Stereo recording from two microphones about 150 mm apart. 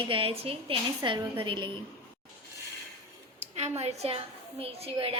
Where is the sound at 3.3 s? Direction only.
45° right (ahead or behind).